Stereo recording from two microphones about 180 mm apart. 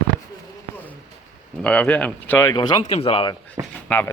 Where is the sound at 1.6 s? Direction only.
5° left (ahead or behind); by 3.4 s 25° left (ahead or behind).